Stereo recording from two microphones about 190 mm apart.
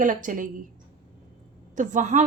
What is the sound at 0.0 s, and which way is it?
Speech, 45° right (ahead or behind).